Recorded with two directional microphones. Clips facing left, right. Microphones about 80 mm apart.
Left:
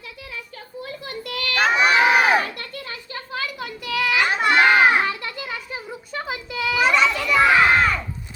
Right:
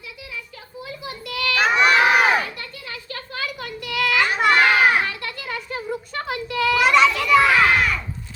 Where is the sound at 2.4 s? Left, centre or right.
Left.